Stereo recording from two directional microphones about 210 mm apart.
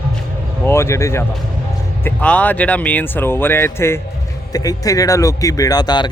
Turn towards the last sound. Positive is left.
turn(degrees=20)  # may be behind; listen again after turning